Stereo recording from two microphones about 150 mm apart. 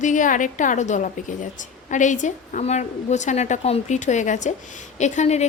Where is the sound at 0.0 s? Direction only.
60° left (ahead or behind).